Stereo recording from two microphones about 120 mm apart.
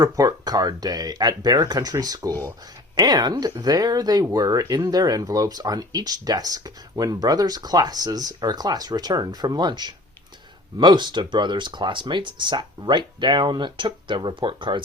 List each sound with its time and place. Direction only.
0.0 s speech: 30° right (ahead or behind)